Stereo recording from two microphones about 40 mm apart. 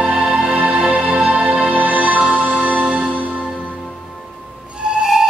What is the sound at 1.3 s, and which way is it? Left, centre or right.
Music, right.